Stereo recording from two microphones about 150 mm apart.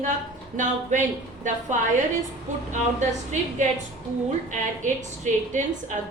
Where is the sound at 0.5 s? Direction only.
55° right (ahead or behind).